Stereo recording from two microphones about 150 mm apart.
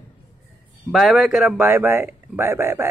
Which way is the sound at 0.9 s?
Centre (ahead or behind).